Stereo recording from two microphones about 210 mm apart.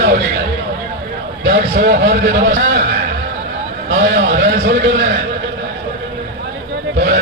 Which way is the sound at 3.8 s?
50° right (ahead or behind).